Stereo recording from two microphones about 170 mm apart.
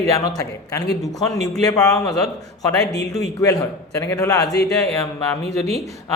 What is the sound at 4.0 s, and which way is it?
Speech, 20° left (ahead or behind).